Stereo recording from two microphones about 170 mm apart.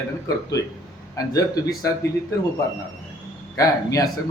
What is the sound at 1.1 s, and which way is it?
Speech, 20° left (ahead or behind).